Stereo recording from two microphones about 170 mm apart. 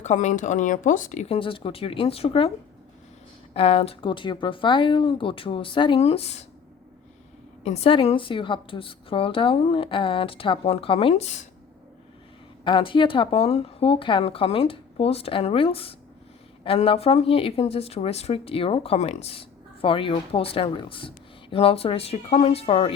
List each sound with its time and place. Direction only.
0.0 s speech: 45° left (ahead or behind)
1.4 s speech: 30° left (ahead or behind)
3.5 s speech: 35° left (ahead or behind)
7.6 s speech: 40° left (ahead or behind)
12.6 s speech: 30° left (ahead or behind)